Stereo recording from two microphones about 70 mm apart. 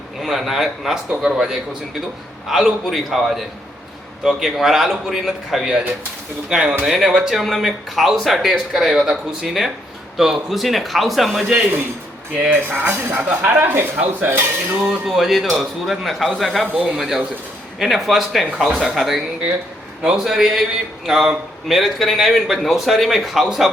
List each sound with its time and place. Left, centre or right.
0.2 s a man's voice: centre
6.8 s speech: centre
12.5 s speech: right
14.8 s a man's voice: centre